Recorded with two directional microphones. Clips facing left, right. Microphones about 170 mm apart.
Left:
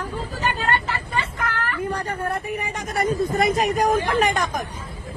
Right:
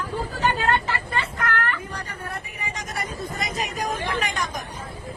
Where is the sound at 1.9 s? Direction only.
50° left (ahead or behind).